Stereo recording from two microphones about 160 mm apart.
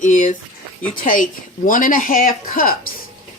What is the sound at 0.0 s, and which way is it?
A woman's voice, 50° left (ahead or behind).